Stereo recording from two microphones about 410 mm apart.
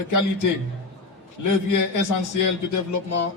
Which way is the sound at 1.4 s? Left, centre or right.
Left.